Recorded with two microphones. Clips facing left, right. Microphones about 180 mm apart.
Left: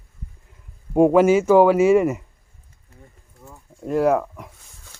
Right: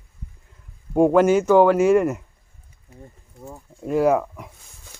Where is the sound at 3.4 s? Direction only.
30° right (ahead or behind).